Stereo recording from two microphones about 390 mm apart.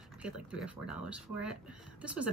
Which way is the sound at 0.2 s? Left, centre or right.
Centre.